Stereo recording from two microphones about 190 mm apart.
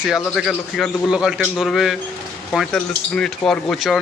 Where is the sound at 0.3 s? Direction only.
Centre (ahead or behind).